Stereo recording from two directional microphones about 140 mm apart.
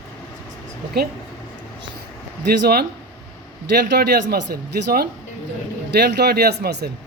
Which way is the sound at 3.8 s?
90° right.